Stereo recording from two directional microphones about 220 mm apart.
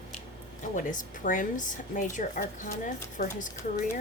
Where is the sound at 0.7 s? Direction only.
35° left (ahead or behind).